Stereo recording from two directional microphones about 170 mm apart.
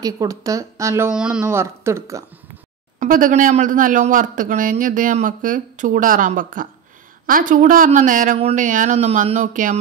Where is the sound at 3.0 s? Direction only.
50° right (ahead or behind).